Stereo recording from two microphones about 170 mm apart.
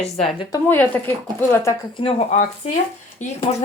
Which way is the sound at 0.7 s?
10° left (ahead or behind).